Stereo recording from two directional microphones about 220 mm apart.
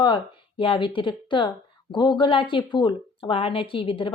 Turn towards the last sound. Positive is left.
turn(degrees=25)  # may be behind; listen again after turning